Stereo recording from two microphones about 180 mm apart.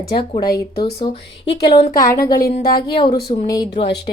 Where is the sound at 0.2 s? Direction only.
25° left (ahead or behind).